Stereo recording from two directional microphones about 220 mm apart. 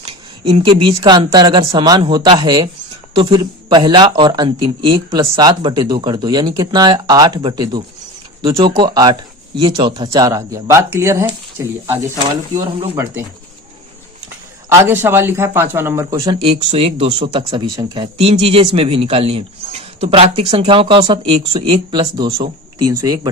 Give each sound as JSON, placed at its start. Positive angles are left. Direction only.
{"t": 0.1, "sound": "speech", "side_deg": -20}
{"t": 14.8, "sound": "speech", "side_deg": -10}